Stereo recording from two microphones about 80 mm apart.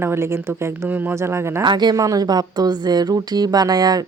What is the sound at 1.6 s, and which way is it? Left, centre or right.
Speech, right.